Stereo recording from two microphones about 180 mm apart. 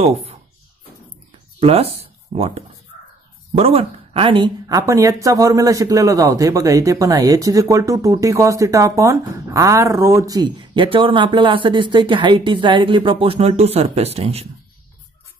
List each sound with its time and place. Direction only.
0.0 s speech: 35° right (ahead or behind)
1.6 s a woman's voice: 35° right (ahead or behind)